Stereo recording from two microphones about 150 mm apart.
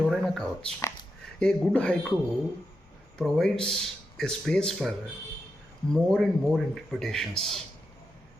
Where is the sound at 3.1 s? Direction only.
Centre (ahead or behind).